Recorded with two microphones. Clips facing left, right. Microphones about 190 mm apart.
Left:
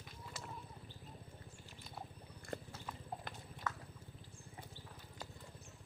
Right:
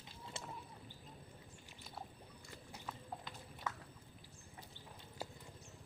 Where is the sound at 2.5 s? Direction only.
55° left (ahead or behind).